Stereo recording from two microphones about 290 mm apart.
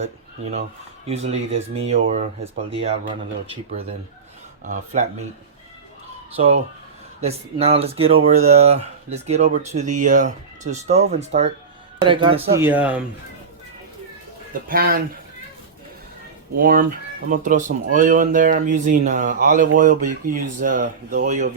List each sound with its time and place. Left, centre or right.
1.0 s speech: right
6.3 s speech: right; by 13.1 s centre
14.5 s speech: right
17.2 s speech: right